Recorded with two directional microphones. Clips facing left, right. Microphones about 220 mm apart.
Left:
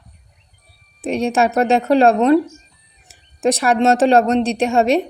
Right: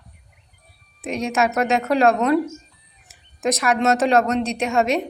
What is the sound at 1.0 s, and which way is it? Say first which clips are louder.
A woman's voice: left 5 dB; 30° left (ahead or behind).